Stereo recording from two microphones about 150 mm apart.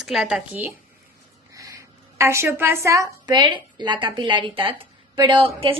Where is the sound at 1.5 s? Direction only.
20° right (ahead or behind); by 5.7 s 40° right (ahead or behind).